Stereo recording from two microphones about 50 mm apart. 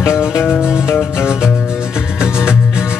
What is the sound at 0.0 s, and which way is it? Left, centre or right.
Music, left.